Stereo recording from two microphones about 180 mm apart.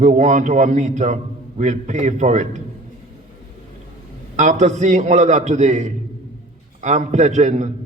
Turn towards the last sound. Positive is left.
turn(degrees=-40)  # may be behind; listen again after turning